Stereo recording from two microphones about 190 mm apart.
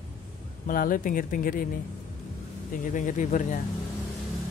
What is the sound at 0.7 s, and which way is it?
Speech, 45° left (ahead or behind).